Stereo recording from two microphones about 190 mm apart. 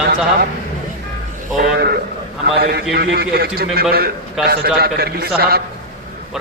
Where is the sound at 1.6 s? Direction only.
55° right (ahead or behind).